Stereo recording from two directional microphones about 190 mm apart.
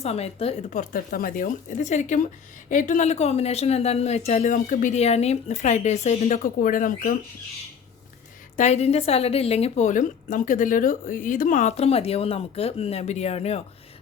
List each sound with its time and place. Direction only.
0.0 s a woman's voice: 35° left (ahead or behind)
0.7 s a woman's voice: 50° left (ahead or behind)
8.5 s a woman's voice: 35° left (ahead or behind)